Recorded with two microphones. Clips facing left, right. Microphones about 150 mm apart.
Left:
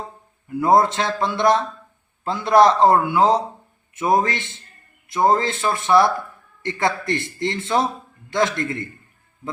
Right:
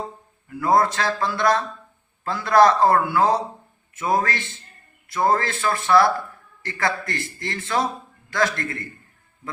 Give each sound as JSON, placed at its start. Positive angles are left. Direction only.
{"t": 0.6, "sound": "a man's voice", "side_deg": 20}